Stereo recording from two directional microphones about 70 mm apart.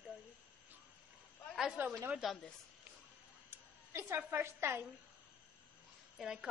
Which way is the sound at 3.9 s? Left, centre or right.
Right.